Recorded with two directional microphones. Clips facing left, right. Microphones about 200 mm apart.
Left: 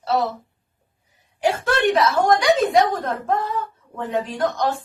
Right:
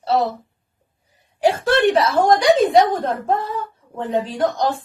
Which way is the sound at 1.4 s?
35° right (ahead or behind).